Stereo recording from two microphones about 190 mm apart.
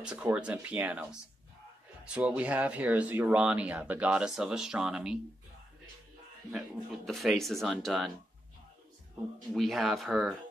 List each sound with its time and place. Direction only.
0.0 s speech: 5° right (ahead or behind)
2.1 s speech: 5° right (ahead or behind)
7.1 s speech: centre (ahead or behind)
9.5 s speech: centre (ahead or behind)